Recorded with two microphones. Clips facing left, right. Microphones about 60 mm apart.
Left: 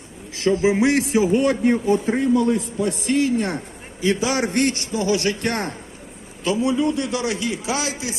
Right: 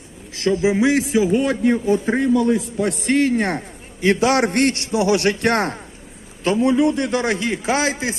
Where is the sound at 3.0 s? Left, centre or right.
Right.